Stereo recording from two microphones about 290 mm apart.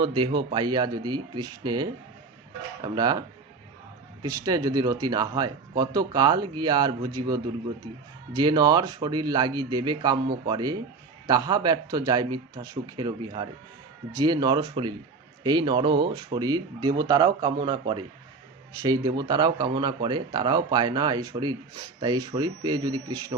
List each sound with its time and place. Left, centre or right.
0.0 s speech: centre
4.4 s speech: centre